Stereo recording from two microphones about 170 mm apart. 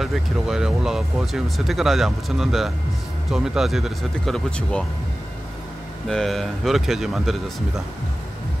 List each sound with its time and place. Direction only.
0.0 s speech: centre (ahead or behind)
6.0 s speech: centre (ahead or behind)